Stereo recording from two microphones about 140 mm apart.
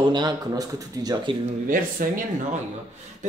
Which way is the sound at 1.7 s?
75° right (ahead or behind).